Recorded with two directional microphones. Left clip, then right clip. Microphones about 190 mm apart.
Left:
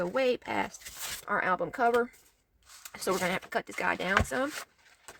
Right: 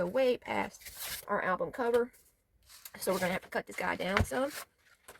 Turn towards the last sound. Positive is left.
turn(degrees=60)  # may be behind; listen again after turning